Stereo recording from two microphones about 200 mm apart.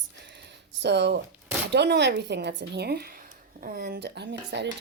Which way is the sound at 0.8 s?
60° right (ahead or behind).